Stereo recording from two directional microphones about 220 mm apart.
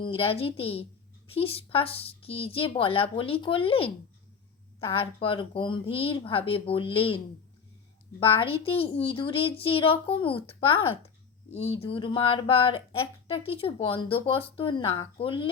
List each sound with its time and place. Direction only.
0.0 s a child's voice: 25° left (ahead or behind)
8.2 s a child's voice: 25° left (ahead or behind)